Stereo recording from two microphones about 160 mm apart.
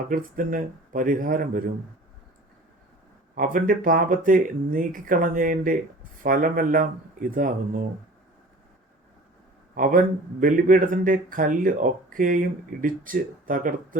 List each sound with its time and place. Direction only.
0.1 s speech: 60° right (ahead or behind)
3.3 s speech: 60° right (ahead or behind)
9.7 s speech: 60° right (ahead or behind)